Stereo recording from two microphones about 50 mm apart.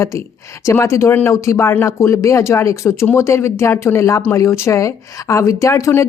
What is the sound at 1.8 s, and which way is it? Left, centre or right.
Speech, left.